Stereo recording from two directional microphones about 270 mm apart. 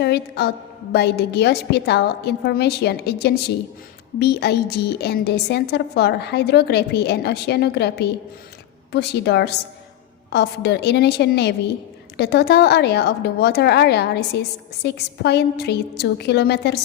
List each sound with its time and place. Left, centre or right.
0.0 s a woman's voice: left